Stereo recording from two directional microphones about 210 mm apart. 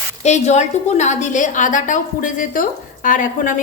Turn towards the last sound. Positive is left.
turn(degrees=40)  # may be behind; listen again after turning